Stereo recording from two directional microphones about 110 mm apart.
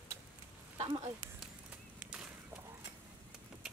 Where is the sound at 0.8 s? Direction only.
50° right (ahead or behind).